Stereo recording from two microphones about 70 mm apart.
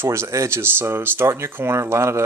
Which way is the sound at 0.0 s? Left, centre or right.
Right.